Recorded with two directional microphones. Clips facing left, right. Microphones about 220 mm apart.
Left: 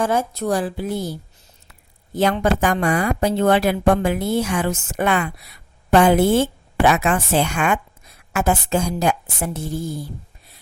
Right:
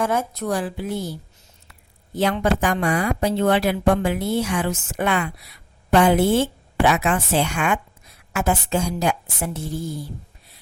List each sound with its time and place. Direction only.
0.0 s a woman's voice: 30° left (ahead or behind)
2.1 s speech: 45° left (ahead or behind)